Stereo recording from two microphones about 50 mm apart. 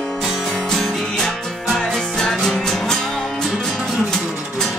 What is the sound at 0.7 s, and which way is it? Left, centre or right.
Music, centre.